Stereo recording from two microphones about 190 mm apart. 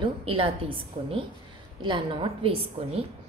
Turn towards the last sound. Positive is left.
turn(degrees=-30)  # may be behind; listen again after turning